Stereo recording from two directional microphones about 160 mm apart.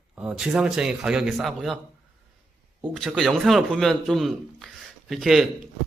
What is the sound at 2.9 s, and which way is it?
A man's voice, centre (ahead or behind).